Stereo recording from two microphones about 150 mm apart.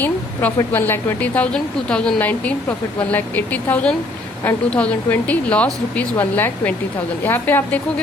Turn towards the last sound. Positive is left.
turn(degrees=15)  # may be behind; listen again after turning